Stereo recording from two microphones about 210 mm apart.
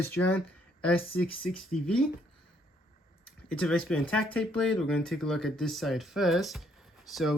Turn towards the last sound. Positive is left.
turn(degrees=0)  # may be behind; listen again after turning